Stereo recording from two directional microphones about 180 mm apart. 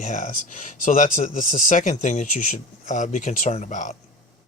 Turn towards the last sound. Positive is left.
turn(degrees=45)  # may be behind; listen again after turning